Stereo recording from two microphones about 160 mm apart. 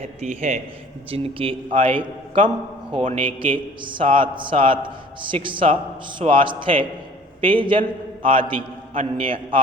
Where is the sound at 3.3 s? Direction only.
35° right (ahead or behind).